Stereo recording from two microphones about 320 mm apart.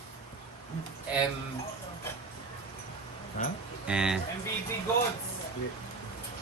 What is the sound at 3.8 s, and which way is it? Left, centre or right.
Speech, centre.